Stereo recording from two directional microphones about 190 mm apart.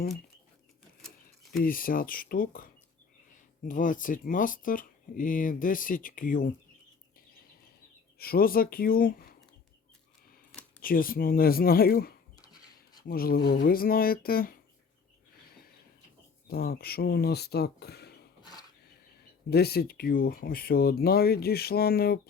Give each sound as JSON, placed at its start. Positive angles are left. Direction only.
{"t": 1.6, "sound": "speech", "side_deg": 50}
{"t": 8.2, "sound": "speech", "side_deg": 50}
{"t": 10.8, "sound": "speech", "side_deg": 50}
{"t": 15.5, "sound": "a sound", "side_deg": 55}
{"t": 16.5, "sound": "speech", "side_deg": 55}
{"t": 19.5, "sound": "speech", "side_deg": 55}